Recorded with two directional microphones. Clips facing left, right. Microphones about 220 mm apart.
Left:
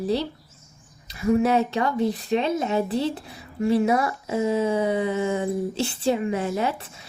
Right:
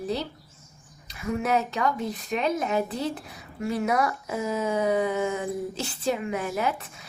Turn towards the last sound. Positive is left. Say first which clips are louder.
# left 2 dB
turn(degrees=30)  # may be behind; listen again after turning